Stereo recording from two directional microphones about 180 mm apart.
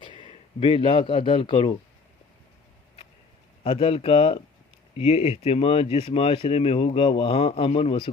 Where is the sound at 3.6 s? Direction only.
30° left (ahead or behind).